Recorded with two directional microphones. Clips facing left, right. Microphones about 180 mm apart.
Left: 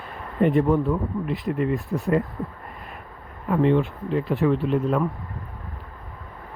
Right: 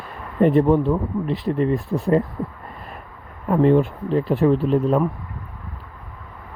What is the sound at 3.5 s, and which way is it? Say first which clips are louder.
Speech: right 4 dB; 40° right (ahead or behind).